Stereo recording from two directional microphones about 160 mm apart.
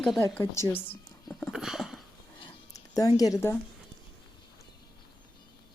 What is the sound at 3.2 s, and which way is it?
Speech, 20° left (ahead or behind).